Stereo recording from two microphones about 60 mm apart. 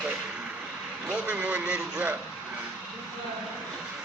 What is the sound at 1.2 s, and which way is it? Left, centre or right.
Speech, centre.